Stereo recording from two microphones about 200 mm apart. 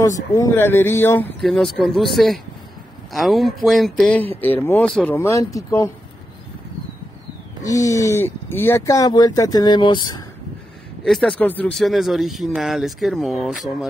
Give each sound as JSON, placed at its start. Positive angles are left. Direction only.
{"t": 0.0, "sound": "speech", "side_deg": 15}
{"t": 7.6, "sound": "speech", "side_deg": 15}
{"t": 11.1, "sound": "speech", "side_deg": 5}